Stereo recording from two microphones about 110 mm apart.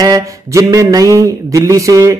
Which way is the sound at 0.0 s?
30° right (ahead or behind).